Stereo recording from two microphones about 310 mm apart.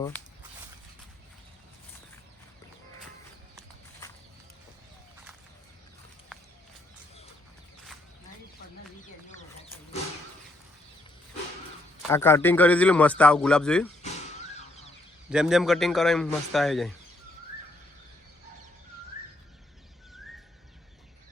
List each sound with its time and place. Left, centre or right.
12.0 s a man's voice: centre
14.0 s car alarm: left
14.5 s a sound: left
15.3 s a man's voice: centre